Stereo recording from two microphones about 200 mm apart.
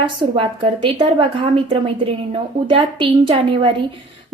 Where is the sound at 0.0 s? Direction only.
25° right (ahead or behind).